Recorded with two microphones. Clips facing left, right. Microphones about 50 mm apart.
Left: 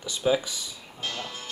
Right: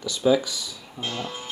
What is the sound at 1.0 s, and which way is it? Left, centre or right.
Speech, right.